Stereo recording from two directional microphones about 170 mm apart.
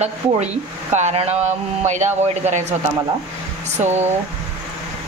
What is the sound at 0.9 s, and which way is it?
A woman's voice, 40° right (ahead or behind).